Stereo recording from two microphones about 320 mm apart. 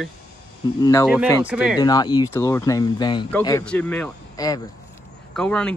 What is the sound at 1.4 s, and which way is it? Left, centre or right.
Speech, centre.